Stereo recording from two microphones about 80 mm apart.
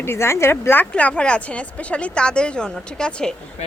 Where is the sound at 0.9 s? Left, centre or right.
Centre.